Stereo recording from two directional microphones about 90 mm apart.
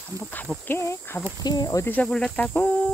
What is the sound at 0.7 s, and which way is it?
Speech, 30° left (ahead or behind).